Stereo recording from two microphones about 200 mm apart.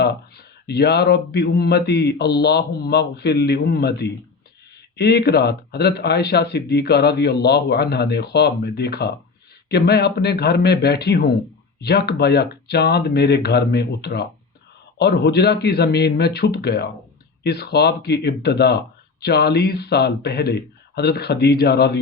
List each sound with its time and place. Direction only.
0.7 s speech: 55° left (ahead or behind)